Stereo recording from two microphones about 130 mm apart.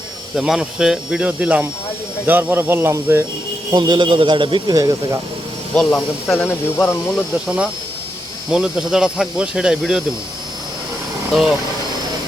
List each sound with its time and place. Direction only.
0.3 s speech: 5° right (ahead or behind); by 3.2 s 20° right (ahead or behind)
3.7 s speech: 35° right (ahead or behind)
5.7 s speech: 5° left (ahead or behind)
7.4 s speech: 5° right (ahead or behind)